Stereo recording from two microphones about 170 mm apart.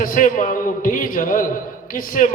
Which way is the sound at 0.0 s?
50° left (ahead or behind).